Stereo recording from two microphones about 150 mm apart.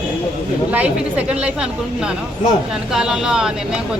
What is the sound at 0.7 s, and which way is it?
Speech, 10° right (ahead or behind).